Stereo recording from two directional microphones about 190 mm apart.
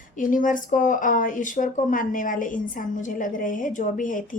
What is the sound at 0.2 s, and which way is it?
A woman's voice, 45° left (ahead or behind).